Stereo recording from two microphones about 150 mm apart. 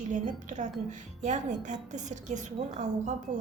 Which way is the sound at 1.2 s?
55° right (ahead or behind).